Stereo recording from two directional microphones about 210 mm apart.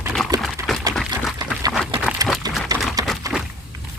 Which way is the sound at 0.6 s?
15° right (ahead or behind).